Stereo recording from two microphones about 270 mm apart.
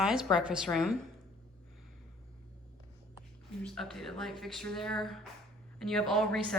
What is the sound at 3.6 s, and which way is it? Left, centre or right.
A woman's voice, centre.